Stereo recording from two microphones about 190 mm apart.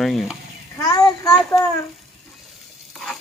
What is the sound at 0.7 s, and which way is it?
Speech, 20° left (ahead or behind).